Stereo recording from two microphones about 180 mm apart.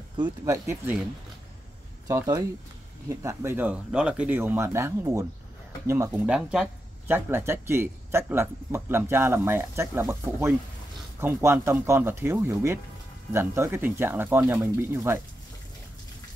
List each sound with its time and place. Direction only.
0.2 s speech: 15° right (ahead or behind)
2.0 s speech: 20° right (ahead or behind)
6.1 s speech: 5° right (ahead or behind)